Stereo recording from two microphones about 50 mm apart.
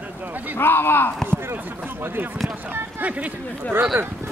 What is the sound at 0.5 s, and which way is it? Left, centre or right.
Speech, left.